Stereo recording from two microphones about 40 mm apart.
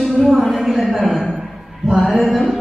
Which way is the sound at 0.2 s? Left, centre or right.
Centre.